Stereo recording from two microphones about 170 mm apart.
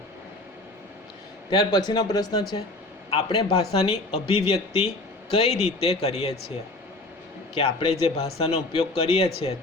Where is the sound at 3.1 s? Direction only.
35° left (ahead or behind).